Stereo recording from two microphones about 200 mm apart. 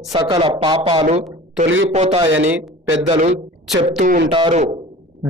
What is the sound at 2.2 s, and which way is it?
Speech, 75° right (ahead or behind).